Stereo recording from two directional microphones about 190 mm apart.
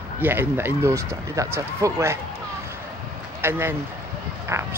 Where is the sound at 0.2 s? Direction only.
10° right (ahead or behind).